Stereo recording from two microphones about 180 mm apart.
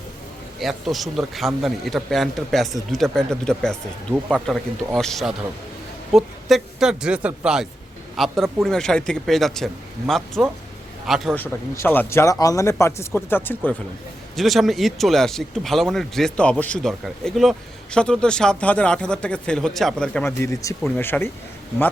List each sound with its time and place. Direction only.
0.6 s a man's voice: centre (ahead or behind)
11.3 s speech: 15° left (ahead or behind)
14.3 s speech: centre (ahead or behind)
20.4 s speech: 15° left (ahead or behind)